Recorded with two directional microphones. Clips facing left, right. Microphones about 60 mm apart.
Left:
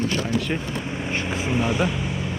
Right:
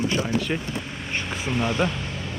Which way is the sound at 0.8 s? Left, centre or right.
Centre.